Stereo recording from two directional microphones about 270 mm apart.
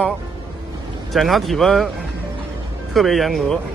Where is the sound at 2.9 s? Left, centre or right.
Centre.